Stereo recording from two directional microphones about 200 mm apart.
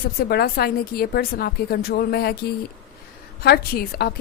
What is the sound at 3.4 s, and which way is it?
Speech, 50° left (ahead or behind).